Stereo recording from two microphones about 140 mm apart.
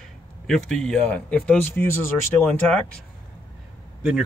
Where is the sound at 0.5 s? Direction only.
5° left (ahead or behind).